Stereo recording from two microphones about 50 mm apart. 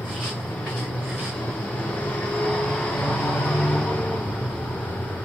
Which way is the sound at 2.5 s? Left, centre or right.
Centre.